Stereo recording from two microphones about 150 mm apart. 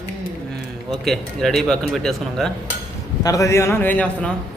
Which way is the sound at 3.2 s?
20° left (ahead or behind).